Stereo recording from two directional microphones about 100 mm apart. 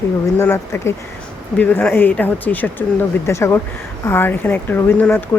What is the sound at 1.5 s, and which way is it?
Speech, 15° left (ahead or behind).